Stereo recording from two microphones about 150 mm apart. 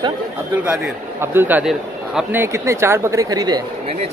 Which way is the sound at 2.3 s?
20° right (ahead or behind).